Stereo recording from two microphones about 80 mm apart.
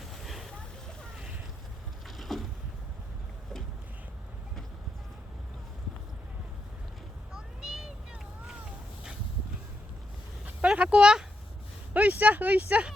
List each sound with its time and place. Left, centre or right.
0.0 s vehicle: centre
2.0 s boat: centre
7.3 s meow: centre
10.4 s a sound: centre
11.9 s speech: right